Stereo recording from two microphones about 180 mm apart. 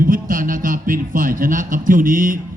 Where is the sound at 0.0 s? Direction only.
50° right (ahead or behind).